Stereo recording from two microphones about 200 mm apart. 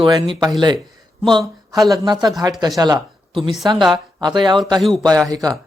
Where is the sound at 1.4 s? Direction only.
Centre (ahead or behind).